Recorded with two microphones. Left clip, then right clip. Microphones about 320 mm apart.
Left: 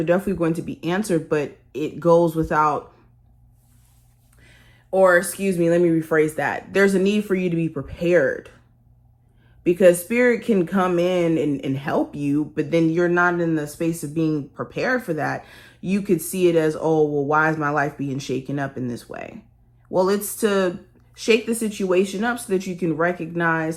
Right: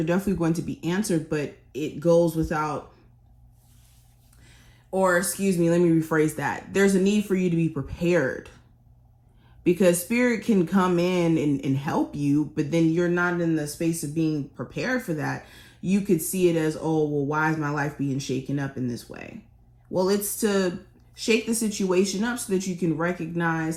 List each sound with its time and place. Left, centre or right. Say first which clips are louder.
0.0 s speech: left 5 dB; centre
2.0 s speech: left 4 dB; centre
4.4 s speech: left 4 dB; centre
9.6 s speech: left 6 dB; centre